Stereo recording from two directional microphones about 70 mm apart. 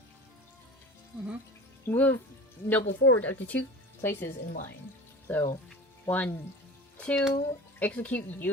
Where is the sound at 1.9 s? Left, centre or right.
Left.